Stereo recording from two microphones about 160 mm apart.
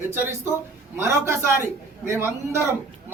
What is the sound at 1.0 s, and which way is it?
Speech, 15° right (ahead or behind).